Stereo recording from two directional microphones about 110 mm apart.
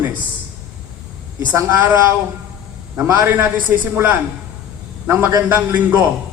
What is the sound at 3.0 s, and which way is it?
A man's voice, 15° right (ahead or behind).